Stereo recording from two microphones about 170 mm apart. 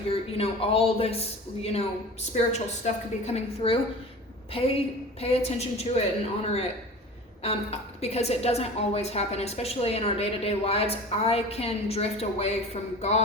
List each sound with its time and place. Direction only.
0.1 s a woman's voice: 35° left (ahead or behind)